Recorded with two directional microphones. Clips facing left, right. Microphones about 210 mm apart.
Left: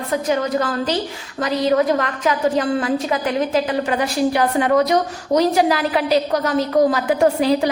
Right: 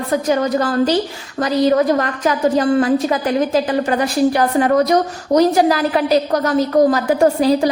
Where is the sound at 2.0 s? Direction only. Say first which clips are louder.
Right 2 dB; 40° right (ahead or behind).